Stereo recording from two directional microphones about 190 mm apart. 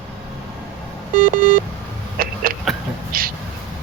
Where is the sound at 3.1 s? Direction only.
50° right (ahead or behind).